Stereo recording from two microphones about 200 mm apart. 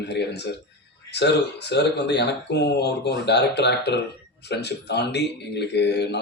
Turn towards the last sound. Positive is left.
turn(degrees=55)  # may be behind; listen again after turning